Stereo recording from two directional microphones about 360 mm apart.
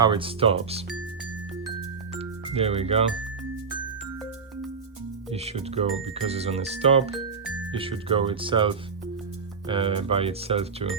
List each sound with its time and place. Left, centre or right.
0.0 s speech: centre
2.1 s music: centre
5.3 s speech: centre